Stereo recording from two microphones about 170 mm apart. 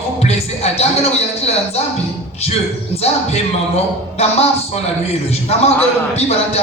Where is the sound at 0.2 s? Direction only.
40° left (ahead or behind).